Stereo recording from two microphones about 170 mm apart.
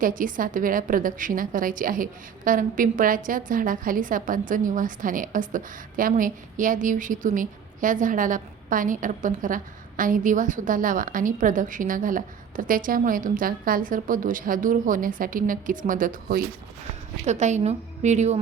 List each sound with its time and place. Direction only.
0.0 s a woman's voice: 50° right (ahead or behind)